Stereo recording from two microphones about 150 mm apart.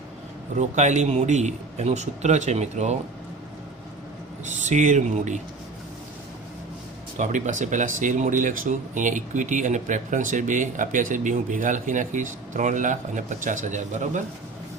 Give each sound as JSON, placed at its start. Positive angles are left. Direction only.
{"t": 0.5, "sound": "a man's voice", "side_deg": -50}
{"t": 4.4, "sound": "a man's voice", "side_deg": -50}
{"t": 7.2, "sound": "speech", "side_deg": -55}